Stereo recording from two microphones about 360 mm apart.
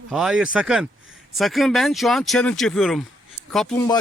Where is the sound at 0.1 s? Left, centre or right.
Centre.